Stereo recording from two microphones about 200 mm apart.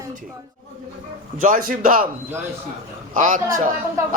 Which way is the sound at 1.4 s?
40° right (ahead or behind).